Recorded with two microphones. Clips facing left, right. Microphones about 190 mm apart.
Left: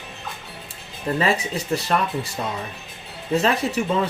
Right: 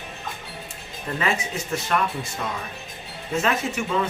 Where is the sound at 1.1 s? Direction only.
35° left (ahead or behind).